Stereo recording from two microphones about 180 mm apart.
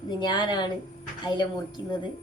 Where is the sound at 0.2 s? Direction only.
25° left (ahead or behind).